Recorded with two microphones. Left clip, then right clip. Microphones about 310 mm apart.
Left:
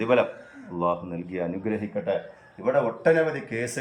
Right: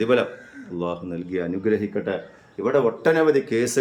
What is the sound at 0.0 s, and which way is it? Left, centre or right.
Speech, centre.